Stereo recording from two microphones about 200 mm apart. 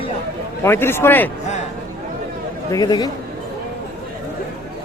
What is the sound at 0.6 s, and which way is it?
Speech, 10° left (ahead or behind).